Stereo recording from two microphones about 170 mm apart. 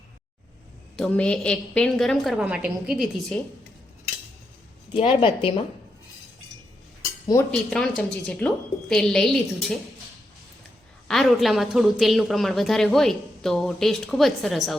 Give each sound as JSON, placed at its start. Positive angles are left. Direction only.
{"t": 0.9, "sound": "a man's voice", "side_deg": 5}
{"t": 4.9, "sound": "a woman's voice", "side_deg": 30}
{"t": 7.3, "sound": "cutlery", "side_deg": 20}
{"t": 7.7, "sound": "a man's voice", "side_deg": 5}
{"t": 11.1, "sound": "a man's voice", "side_deg": 0}